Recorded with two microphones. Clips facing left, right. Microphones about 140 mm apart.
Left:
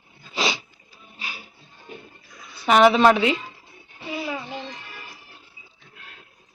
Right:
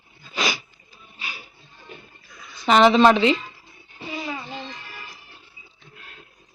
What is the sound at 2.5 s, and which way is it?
Speech, 10° left (ahead or behind).